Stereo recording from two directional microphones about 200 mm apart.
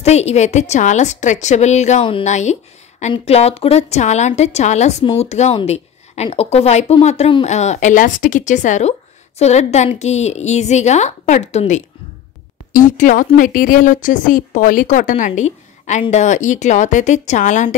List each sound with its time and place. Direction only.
0.0 s a woman's voice: 35° left (ahead or behind)